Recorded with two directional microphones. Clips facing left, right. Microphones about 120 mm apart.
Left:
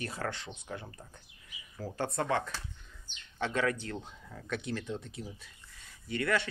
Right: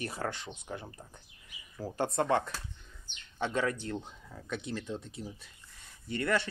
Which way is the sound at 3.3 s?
30° right (ahead or behind).